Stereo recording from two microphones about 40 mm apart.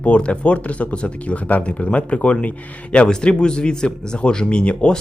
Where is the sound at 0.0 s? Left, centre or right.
Left.